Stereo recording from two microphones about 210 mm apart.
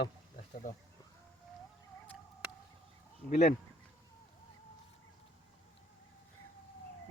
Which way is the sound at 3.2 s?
35° left (ahead or behind).